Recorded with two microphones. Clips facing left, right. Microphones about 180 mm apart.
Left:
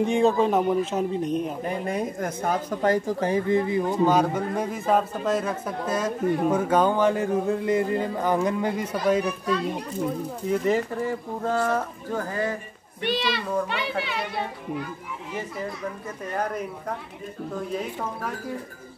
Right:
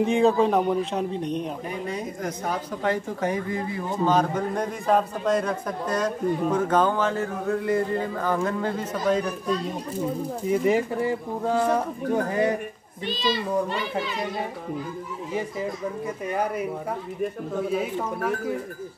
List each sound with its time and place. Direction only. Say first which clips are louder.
0.0 s a man's voice: right 1 dB; centre (ahead or behind)
1.9 s a woman's voice: left 3 dB; 55° left (ahead or behind); by 3.8 s 25° left (ahead or behind)
4.0 s a man's voice: right 1 dB; 10° left (ahead or behind)
10.5 s speech: right 1 dB; 10° right (ahead or behind)
13.0 s a child's voice: even; 70° left (ahead or behind)
16.3 s speech: right 1 dB; 10° right (ahead or behind)
17.7 s a man's voice: right 3 dB; 5° right (ahead or behind)